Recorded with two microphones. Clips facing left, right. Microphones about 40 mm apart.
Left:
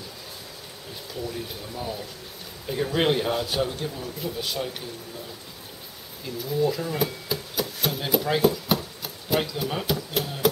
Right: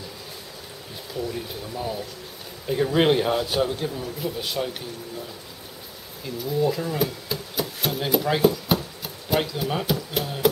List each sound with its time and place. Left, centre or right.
1.8 s speech: centre
6.2 s speech: centre